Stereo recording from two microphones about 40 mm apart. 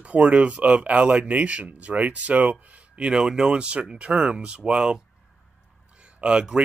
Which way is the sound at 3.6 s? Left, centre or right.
Right.